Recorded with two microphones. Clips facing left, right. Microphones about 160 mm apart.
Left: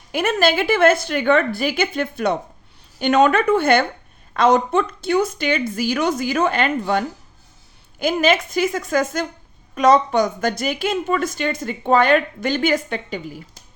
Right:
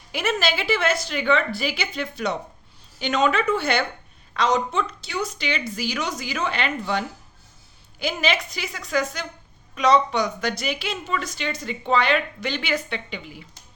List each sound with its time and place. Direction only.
0.1 s a woman's voice: 50° left (ahead or behind)